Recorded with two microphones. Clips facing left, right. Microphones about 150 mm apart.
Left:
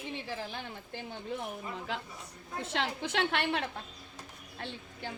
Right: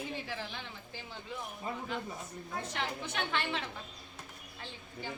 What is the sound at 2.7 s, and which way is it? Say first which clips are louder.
Speech: left 7 dB; 90° left.